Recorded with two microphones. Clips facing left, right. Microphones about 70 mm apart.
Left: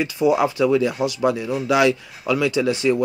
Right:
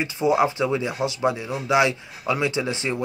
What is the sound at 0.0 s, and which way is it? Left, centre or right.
Speech, right.